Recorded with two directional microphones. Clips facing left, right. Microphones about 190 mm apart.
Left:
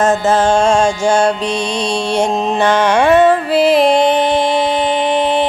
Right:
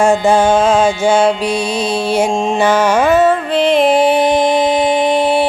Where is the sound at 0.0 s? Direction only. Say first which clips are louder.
Right 2 dB; 15° right (ahead or behind); by 2.6 s 5° left (ahead or behind).